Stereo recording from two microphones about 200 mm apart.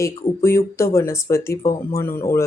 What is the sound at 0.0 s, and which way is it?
Speech, 15° left (ahead or behind).